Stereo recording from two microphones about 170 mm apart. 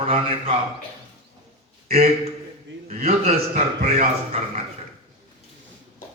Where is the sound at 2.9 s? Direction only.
40° right (ahead or behind).